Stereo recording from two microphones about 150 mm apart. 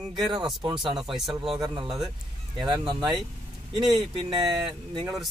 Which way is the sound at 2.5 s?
30° right (ahead or behind).